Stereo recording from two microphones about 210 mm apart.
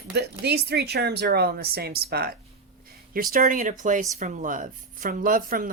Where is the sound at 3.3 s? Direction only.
40° right (ahead or behind).